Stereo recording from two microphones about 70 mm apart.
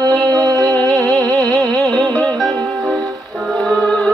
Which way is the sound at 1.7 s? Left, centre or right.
Centre.